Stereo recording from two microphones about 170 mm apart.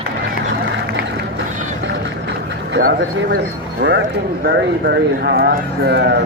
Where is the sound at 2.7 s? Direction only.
65° right (ahead or behind).